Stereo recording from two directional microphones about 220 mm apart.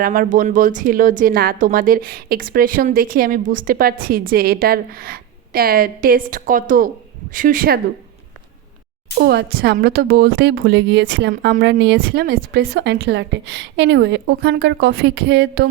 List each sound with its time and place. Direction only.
0.0 s speech: 40° right (ahead or behind)
9.1 s a woman's voice: 50° right (ahead or behind)